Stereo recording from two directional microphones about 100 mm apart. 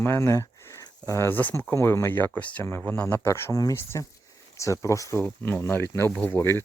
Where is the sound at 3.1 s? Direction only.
25° left (ahead or behind).